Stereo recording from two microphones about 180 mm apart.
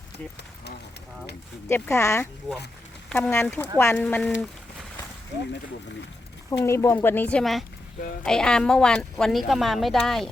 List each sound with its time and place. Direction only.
1.6 s speech: 15° left (ahead or behind)
6.5 s speech: 15° left (ahead or behind)